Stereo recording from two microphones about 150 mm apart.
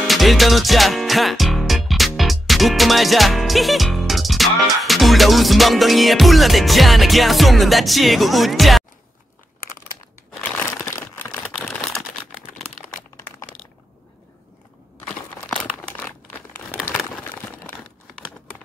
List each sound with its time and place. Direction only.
0.0 s music: centre (ahead or behind)
10.4 s crumpling: 20° left (ahead or behind)
11.6 s typing: centre (ahead or behind)
12.5 s crumpling: centre (ahead or behind)
15.0 s crumpling: 5° left (ahead or behind)
16.9 s a sound: 10° left (ahead or behind)